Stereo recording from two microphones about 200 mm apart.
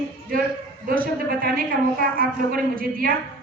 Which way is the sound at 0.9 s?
45° right (ahead or behind).